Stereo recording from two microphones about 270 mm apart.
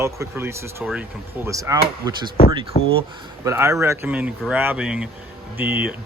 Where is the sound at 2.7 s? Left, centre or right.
Left.